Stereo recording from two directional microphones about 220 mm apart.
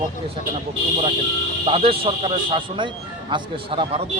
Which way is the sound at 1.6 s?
25° right (ahead or behind).